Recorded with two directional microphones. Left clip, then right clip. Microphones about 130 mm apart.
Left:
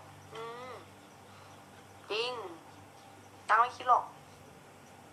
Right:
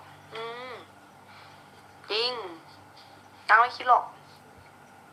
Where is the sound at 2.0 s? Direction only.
20° right (ahead or behind).